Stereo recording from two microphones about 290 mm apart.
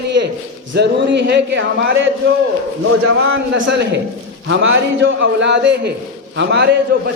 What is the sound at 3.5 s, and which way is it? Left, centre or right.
A man's voice, right.